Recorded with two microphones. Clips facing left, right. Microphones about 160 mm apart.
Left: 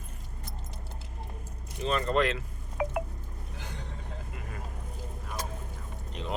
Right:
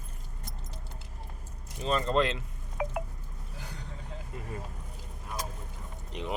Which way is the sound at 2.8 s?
70° left (ahead or behind).